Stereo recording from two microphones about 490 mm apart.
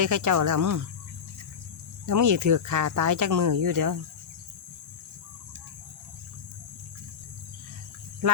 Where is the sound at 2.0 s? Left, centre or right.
Right.